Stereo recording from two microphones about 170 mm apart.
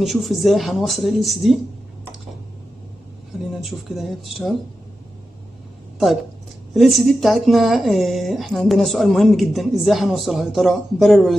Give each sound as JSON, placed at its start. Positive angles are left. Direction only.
{"t": 0.0, "sound": "speech", "side_deg": 0}
{"t": 3.6, "sound": "speech", "side_deg": 0}
{"t": 6.7, "sound": "speech", "side_deg": 0}